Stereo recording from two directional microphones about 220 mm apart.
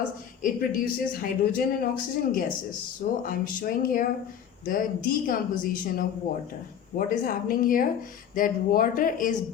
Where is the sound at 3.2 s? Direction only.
40° left (ahead or behind).